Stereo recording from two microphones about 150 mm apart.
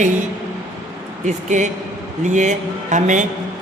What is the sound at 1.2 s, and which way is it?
A man's voice, 55° right (ahead or behind).